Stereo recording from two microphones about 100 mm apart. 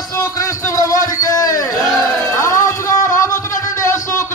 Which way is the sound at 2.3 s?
30° left (ahead or behind).